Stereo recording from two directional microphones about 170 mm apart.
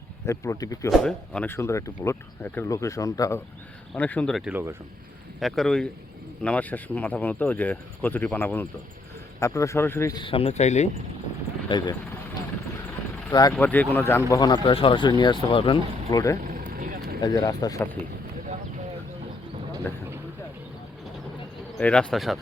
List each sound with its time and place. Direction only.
0.3 s speech: 20° left (ahead or behind)
0.9 s speech: 5° left (ahead or behind); by 10.8 s 45° left (ahead or behind)
11.7 s speech: 30° left (ahead or behind)
13.5 s speech: 10° left (ahead or behind); by 15.8 s 30° left (ahead or behind)
16.0 s speech: 20° left (ahead or behind)
16.4 s vehicle: 50° right (ahead or behind)
17.2 s speech: 20° left (ahead or behind)
19.9 s speech: 10° left (ahead or behind)
21.8 s speech: 5° left (ahead or behind)